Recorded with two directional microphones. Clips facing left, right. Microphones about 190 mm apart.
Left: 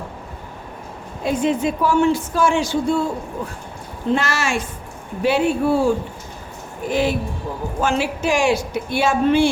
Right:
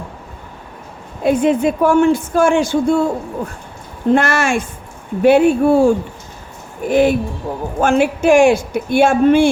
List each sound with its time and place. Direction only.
1.2 s speech: 55° right (ahead or behind)
4.1 s speech: 55° right (ahead or behind)